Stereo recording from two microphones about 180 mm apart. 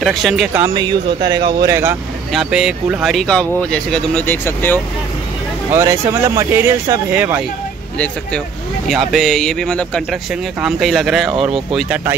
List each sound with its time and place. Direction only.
0.0 s speech: centre (ahead or behind)
0.7 s speech: 25° right (ahead or behind); by 4.7 s 10° left (ahead or behind)
5.7 s speech: 15° right (ahead or behind)
8.8 s speech: centre (ahead or behind)